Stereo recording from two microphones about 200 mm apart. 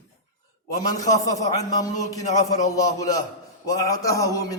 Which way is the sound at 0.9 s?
15° left (ahead or behind).